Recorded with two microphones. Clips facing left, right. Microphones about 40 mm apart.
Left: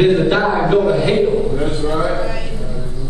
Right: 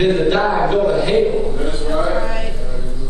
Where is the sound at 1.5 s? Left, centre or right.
Centre.